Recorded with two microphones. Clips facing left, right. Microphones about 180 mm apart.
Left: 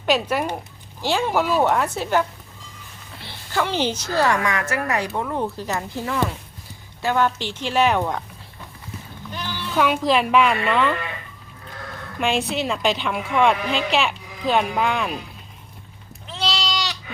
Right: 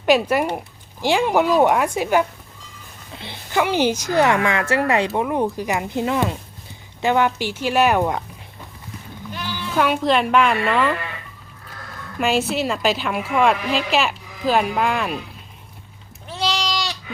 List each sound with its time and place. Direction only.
0.0 s a woman's voice: 10° right (ahead or behind)
9.3 s speech: centre (ahead or behind)
12.2 s a woman's voice: 5° right (ahead or behind)
16.5 s goat: 15° right (ahead or behind)